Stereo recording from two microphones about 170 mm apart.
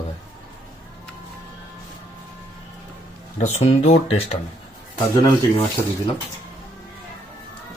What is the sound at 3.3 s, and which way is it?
Speech, 40° left (ahead or behind).